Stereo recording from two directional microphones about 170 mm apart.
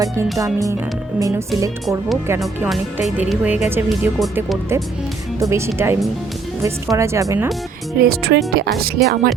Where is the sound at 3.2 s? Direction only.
10° right (ahead or behind).